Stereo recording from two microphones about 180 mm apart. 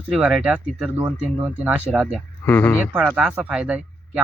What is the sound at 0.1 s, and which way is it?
Speech, 5° right (ahead or behind).